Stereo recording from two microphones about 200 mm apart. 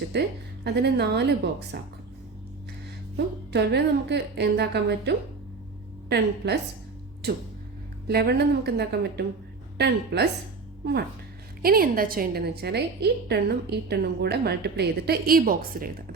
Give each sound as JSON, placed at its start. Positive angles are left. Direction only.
{"t": 0.1, "sound": "a woman's voice", "side_deg": -55}
{"t": 3.5, "sound": "a woman's voice", "side_deg": -55}
{"t": 11.6, "sound": "a woman's voice", "side_deg": -45}